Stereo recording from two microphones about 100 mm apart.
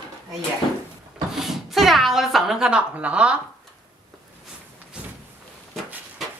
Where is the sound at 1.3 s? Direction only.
5° right (ahead or behind).